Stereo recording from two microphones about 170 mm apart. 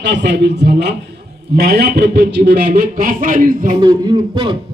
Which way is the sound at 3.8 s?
25° right (ahead or behind).